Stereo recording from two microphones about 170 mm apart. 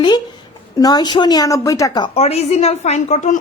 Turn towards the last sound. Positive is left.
turn(degrees=45)  # may be behind; listen again after turning